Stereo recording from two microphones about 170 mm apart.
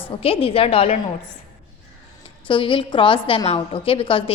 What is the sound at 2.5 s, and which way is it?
A woman's voice, 30° left (ahead or behind).